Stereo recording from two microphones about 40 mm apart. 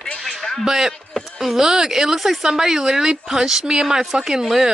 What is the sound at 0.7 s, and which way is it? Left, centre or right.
A woman's voice, centre.